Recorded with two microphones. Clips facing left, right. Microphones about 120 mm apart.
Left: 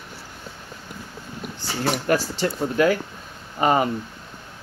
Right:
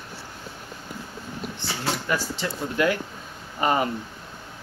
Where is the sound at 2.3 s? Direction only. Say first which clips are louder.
Left 5 dB; 35° left (ahead or behind).